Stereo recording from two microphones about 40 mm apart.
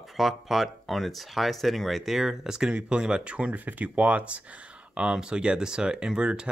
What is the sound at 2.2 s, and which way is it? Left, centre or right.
Speech, centre.